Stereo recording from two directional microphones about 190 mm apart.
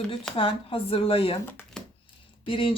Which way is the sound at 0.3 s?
30° left (ahead or behind).